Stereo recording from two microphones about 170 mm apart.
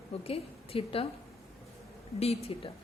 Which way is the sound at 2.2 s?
35° left (ahead or behind).